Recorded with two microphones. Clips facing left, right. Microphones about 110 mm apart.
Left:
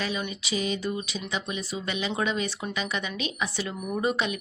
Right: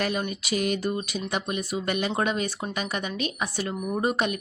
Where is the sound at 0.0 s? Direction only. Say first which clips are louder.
Right 3 dB; 55° right (ahead or behind).